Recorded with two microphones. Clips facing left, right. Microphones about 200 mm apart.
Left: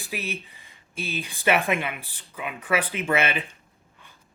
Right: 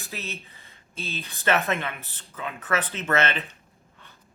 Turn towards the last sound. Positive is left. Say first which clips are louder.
# left 1 dB
turn(degrees=10)  # may be behind; listen again after turning